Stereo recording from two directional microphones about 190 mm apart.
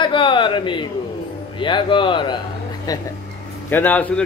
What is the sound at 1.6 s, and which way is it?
Speech, 25° left (ahead or behind).